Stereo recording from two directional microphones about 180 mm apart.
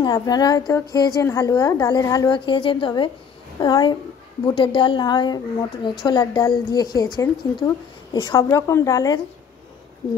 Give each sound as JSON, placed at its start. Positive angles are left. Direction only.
{"t": 0.0, "sound": "a woman's voice", "side_deg": 20}